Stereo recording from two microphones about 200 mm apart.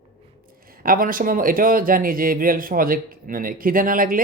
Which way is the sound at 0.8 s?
45° right (ahead or behind).